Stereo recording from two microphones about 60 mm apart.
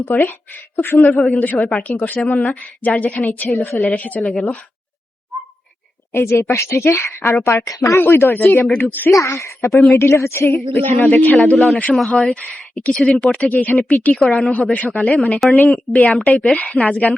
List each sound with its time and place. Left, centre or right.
0.0 s a woman's voice: left
4.2 s speech: centre
6.1 s speech: left
6.4 s speech: left
8.8 s speech: left
9.0 s speech: left
9.7 s speech: centre
10.0 s speech: left
10.7 s a woman's voice: left
11.5 s speech: centre
12.1 s a woman's voice: centre
14.3 s speech: centre
14.5 s a woman's voice: left